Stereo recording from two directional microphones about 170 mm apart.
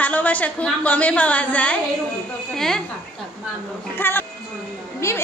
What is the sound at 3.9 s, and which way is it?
A woman's voice, 10° left (ahead or behind).